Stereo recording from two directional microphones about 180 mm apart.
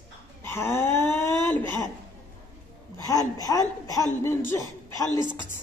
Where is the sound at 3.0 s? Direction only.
20° left (ahead or behind).